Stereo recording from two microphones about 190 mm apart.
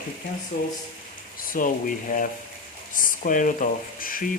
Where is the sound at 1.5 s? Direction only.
45° left (ahead or behind).